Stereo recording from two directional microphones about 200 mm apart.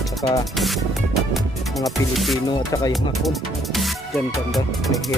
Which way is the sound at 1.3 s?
Centre (ahead or behind).